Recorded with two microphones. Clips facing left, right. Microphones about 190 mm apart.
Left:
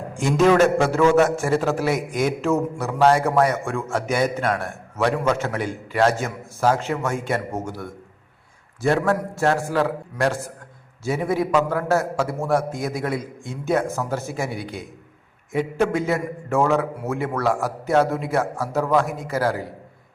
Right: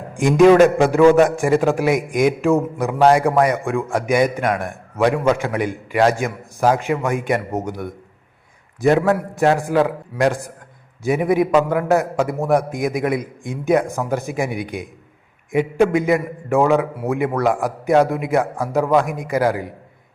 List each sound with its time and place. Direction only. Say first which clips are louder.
0.1 s a man's voice: right 6 dB; 15° right (ahead or behind)